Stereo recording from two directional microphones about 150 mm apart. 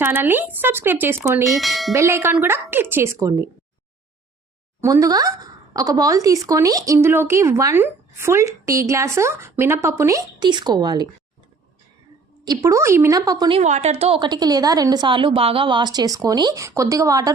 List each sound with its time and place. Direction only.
0.0 s speech: 15° right (ahead or behind)
1.5 s speech: centre (ahead or behind)
1.9 s speech: 20° right (ahead or behind)
4.8 s speech: 20° right (ahead or behind)
12.5 s speech: 20° right (ahead or behind)
13.6 s a woman's voice: 50° right (ahead or behind)
14.2 s speech: 25° right (ahead or behind)